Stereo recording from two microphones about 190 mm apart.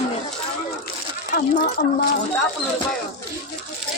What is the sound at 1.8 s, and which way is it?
Speech, 60° left (ahead or behind).